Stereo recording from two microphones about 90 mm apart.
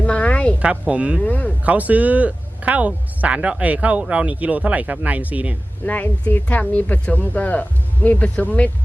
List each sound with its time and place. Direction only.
0.0 s a sound: 15° left (ahead or behind)
0.6 s speech: 15° right (ahead or behind)
1.2 s a woman's voice: 15° left (ahead or behind)
1.6 s speech: 15° right (ahead or behind)
5.8 s a woman's voice: 15° left (ahead or behind)